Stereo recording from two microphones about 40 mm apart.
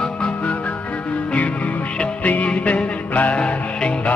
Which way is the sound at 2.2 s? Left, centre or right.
Left.